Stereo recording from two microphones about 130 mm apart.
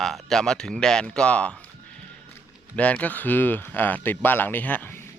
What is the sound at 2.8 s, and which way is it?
Speech, 10° left (ahead or behind).